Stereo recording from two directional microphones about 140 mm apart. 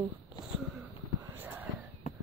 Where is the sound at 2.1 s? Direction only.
55° left (ahead or behind).